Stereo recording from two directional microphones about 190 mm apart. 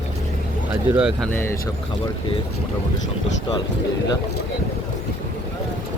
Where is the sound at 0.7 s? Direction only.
5° right (ahead or behind).